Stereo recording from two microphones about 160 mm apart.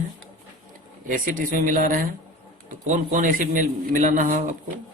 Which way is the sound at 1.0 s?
60° right (ahead or behind).